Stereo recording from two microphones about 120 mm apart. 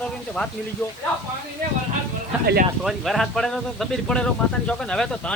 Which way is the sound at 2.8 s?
Centre (ahead or behind).